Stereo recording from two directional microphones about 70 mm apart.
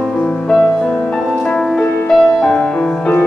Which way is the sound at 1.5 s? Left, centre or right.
Centre.